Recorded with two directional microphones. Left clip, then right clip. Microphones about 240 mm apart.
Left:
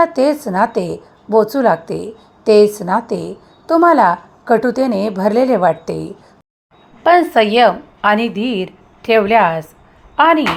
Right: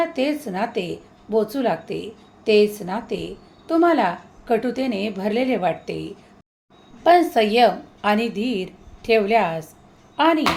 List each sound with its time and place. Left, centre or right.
0.0 s a woman's voice: left
7.0 s a woman's voice: centre